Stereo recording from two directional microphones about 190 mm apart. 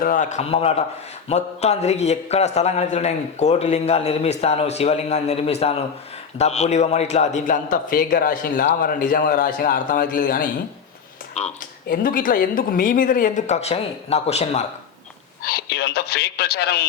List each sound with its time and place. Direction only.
0.0 s a man's voice: 45° left (ahead or behind)
11.9 s a man's voice: 50° left (ahead or behind)
15.4 s speech: 55° left (ahead or behind)